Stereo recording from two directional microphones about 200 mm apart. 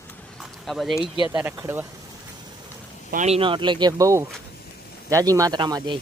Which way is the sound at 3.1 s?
35° right (ahead or behind).